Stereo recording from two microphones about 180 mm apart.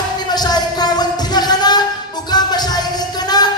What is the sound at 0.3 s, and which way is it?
Music, 20° left (ahead or behind).